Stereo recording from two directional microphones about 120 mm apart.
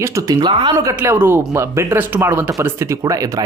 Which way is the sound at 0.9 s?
20° right (ahead or behind).